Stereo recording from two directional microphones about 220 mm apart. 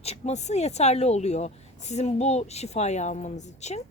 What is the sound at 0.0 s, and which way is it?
A woman's voice, 30° left (ahead or behind).